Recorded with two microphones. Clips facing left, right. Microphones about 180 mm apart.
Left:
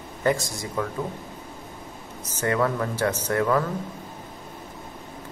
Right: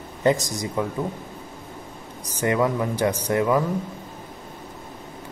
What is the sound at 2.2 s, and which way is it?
Speech, 15° right (ahead or behind).